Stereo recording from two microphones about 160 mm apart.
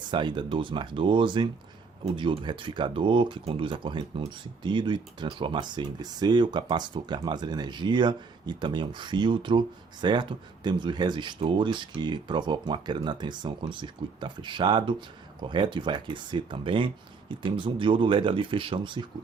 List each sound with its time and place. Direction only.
0.1 s speech: 30° right (ahead or behind)